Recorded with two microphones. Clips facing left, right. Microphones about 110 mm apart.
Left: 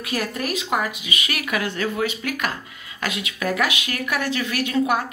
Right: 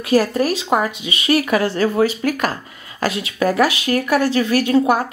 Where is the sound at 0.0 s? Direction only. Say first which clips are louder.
Right 10 dB; 35° right (ahead or behind).